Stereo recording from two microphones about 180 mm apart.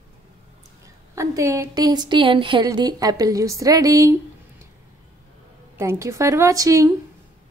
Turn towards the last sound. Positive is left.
turn(degrees=-20)  # may be behind; listen again after turning